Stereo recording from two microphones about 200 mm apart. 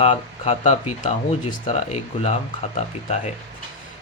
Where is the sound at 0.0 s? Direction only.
30° left (ahead or behind).